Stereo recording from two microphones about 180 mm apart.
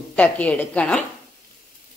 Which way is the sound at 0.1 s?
10° left (ahead or behind).